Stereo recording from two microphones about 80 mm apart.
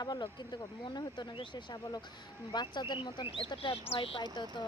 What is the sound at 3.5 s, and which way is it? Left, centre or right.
Speech, left.